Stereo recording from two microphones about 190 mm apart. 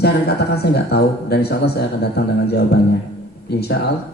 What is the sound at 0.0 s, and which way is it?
Speech, 60° left (ahead or behind).